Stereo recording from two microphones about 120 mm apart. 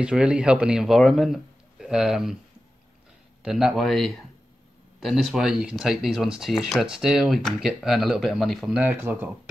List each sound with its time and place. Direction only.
0.0 s speech: 10° right (ahead or behind)
3.4 s speech: 5° right (ahead or behind)
8.9 s speech: 15° right (ahead or behind)